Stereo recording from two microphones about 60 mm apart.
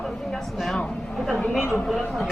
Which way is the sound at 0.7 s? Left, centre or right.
Centre.